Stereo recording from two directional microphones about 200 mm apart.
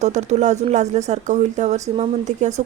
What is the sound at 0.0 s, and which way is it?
Speech, 35° right (ahead or behind).